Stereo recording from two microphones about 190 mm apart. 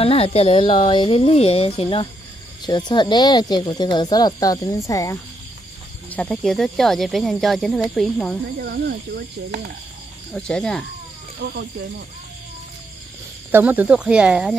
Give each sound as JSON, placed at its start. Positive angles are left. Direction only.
{"t": 0.0, "sound": "speech", "side_deg": 30}
{"t": 8.5, "sound": "speech", "side_deg": -60}
{"t": 10.3, "sound": "speech", "side_deg": 5}
{"t": 13.5, "sound": "speech", "side_deg": -10}